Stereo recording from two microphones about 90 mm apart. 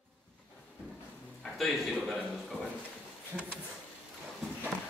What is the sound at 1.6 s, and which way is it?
A man's voice, centre (ahead or behind).